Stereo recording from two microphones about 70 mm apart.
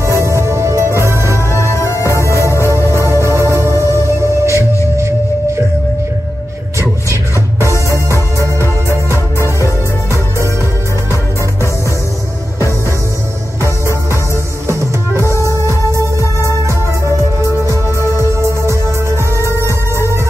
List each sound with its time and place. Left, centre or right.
0.0 s music: right
1.1 s music: left
3.0 s music: right
8.8 s music: left
14.7 s music: right
15.2 s music: left
16.3 s music: right
18.1 s music: right
19.3 s music: left